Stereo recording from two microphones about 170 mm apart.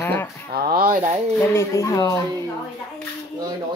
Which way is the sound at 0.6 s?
60° right (ahead or behind).